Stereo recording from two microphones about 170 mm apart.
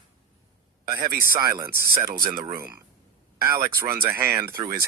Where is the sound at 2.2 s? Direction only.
60° right (ahead or behind).